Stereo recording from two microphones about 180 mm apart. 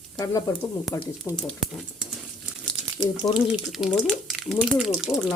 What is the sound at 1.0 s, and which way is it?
Speech, 5° left (ahead or behind).